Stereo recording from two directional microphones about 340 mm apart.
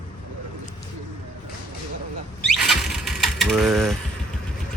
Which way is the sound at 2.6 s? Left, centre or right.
Centre.